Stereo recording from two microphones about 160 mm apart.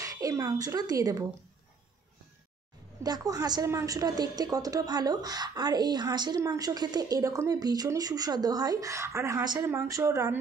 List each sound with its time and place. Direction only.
0.0 s a woman's voice: 20° right (ahead or behind)
3.0 s a woman's voice: 25° right (ahead or behind)